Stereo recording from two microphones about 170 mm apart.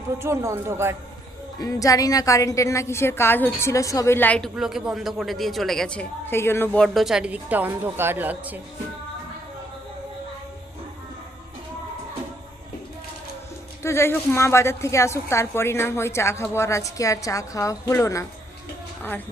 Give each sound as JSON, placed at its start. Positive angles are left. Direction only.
{"t": 0.2, "sound": "a woman's voice", "side_deg": -15}
{"t": 1.5, "sound": "a woman's voice", "side_deg": 20}
{"t": 6.8, "sound": "a woman's voice", "side_deg": 0}
{"t": 13.8, "sound": "a woman's voice", "side_deg": 15}